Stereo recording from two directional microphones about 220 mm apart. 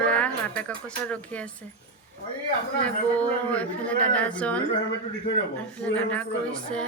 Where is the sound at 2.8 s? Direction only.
5° left (ahead or behind).